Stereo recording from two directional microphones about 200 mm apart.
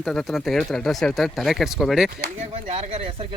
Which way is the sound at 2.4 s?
30° right (ahead or behind).